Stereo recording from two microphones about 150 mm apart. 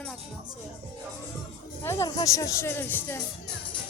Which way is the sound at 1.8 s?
20° left (ahead or behind).